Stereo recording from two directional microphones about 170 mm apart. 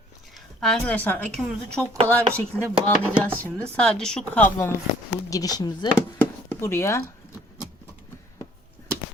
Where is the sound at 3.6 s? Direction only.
5° left (ahead or behind).